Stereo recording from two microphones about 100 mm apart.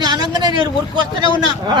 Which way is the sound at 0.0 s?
45° right (ahead or behind).